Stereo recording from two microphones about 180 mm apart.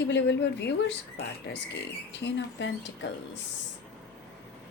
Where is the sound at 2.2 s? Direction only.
75° left (ahead or behind).